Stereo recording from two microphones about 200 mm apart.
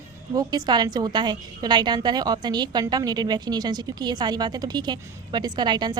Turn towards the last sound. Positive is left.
turn(degrees=-20)  # may be behind; listen again after turning